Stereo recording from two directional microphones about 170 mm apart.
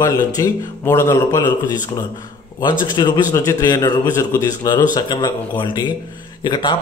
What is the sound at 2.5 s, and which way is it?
Speech, 25° left (ahead or behind).